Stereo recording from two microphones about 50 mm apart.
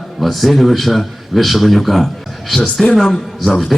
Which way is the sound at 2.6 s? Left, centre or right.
Centre.